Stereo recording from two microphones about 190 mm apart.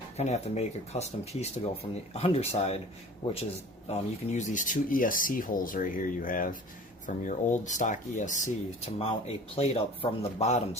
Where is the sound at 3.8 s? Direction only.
40° left (ahead or behind).